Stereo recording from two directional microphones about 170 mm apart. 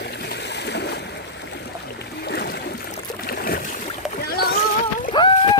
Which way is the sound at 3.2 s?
60° left (ahead or behind).